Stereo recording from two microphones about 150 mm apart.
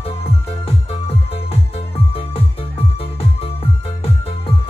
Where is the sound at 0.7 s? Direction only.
40° left (ahead or behind).